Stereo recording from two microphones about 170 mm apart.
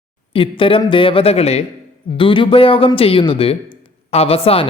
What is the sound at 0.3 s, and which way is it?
A man's voice, 30° left (ahead or behind).